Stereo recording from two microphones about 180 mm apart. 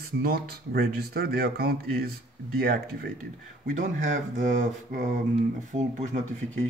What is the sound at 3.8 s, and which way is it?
Speech, 45° right (ahead or behind).